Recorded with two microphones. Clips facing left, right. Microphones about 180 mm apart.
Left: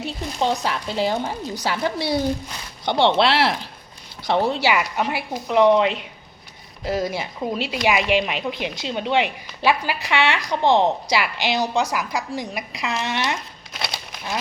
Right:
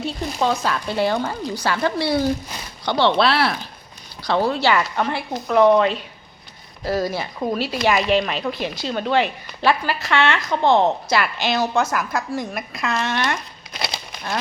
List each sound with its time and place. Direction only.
0.0 s a woman's voice: 20° left (ahead or behind)
4.6 s a woman's voice: 15° left (ahead or behind)
13.7 s crumpling: centre (ahead or behind)